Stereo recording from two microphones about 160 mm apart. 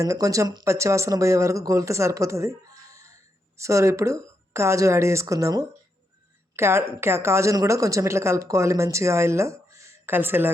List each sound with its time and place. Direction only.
0.0 s a woman's voice: 20° right (ahead or behind)